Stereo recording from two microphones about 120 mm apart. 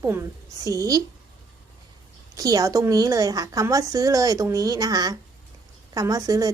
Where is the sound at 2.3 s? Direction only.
30° right (ahead or behind).